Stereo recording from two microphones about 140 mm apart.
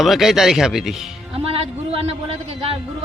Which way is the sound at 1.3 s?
45° right (ahead or behind).